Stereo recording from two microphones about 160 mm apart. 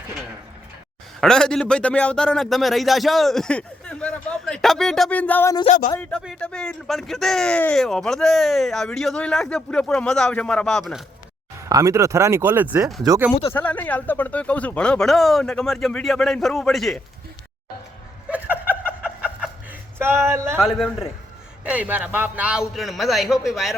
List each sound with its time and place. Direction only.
1.2 s speech: 5° left (ahead or behind)
11.7 s speech: 20° right (ahead or behind)
13.5 s speech: 10° left (ahead or behind)
18.3 s a sound: 10° right (ahead or behind)
20.0 s speech: 15° right (ahead or behind)
20.6 s speech: centre (ahead or behind)
21.6 s speech: 10° right (ahead or behind)